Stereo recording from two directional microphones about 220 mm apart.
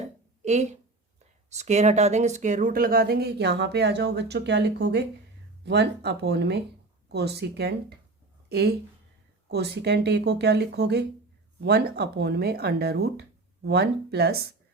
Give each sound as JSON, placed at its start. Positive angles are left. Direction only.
{"t": 0.4, "sound": "speech", "side_deg": -30}